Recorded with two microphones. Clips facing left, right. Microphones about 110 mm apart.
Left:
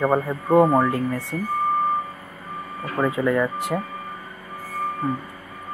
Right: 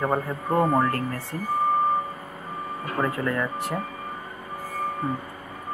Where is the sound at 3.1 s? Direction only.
10° left (ahead or behind).